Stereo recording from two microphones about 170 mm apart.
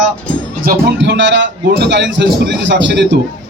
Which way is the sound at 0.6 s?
75° right (ahead or behind).